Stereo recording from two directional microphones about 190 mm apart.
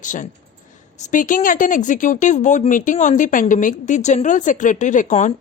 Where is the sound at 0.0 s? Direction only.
40° left (ahead or behind).